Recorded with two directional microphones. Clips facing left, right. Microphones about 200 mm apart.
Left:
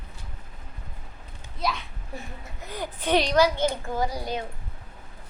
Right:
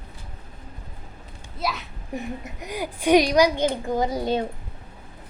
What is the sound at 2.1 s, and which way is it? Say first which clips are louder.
A child's voice: right 9 dB; 15° right (ahead or behind).